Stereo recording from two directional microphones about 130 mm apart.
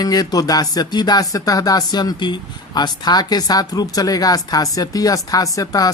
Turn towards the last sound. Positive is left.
turn(degrees=25)  # may be behind; listen again after turning